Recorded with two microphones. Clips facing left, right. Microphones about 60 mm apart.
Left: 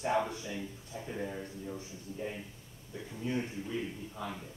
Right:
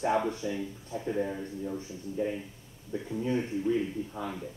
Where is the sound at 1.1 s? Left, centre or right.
Centre.